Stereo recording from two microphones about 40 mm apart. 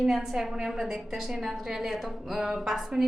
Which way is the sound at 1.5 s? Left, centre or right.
Centre.